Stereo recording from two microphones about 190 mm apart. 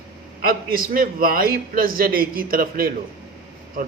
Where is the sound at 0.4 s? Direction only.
50° right (ahead or behind).